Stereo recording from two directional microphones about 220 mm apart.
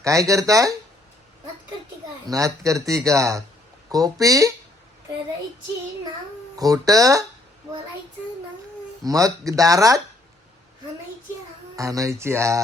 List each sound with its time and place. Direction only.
0.0 s speech: 15° right (ahead or behind)
2.2 s speech: 15° right (ahead or behind)
6.6 s speech: 15° right (ahead or behind)
9.0 s speech: 15° right (ahead or behind)
11.8 s speech: 15° right (ahead or behind)